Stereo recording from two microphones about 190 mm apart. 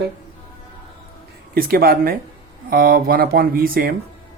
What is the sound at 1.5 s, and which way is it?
Speech, 50° right (ahead or behind).